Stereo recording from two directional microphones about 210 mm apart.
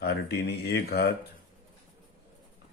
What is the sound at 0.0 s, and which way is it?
Speech, 50° left (ahead or behind).